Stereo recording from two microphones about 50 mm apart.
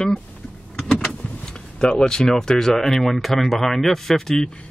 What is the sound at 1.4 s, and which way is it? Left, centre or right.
Speech, centre.